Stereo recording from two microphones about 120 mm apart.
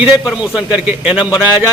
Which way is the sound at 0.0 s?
5° right (ahead or behind).